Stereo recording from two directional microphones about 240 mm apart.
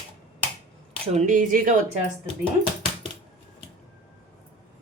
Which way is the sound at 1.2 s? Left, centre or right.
Right.